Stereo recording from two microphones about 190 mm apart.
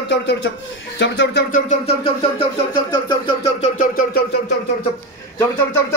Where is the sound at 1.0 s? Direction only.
65° left (ahead or behind).